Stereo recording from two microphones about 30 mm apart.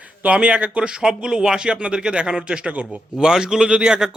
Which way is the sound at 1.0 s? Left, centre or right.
Centre.